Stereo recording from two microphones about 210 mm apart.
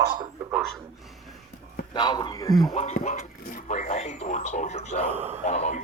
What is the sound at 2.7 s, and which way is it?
Speech, 35° left (ahead or behind).